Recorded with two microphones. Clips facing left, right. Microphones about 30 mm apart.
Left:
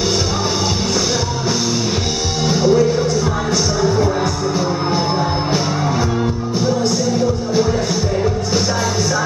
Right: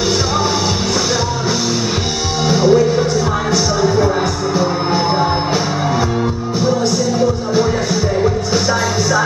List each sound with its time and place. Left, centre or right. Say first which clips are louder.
2.5 s music: right 2 dB; centre